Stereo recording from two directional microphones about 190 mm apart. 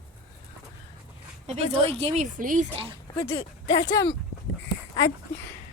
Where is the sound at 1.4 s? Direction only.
35° right (ahead or behind).